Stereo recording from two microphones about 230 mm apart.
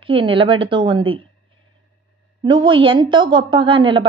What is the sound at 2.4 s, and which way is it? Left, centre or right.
Speech, right.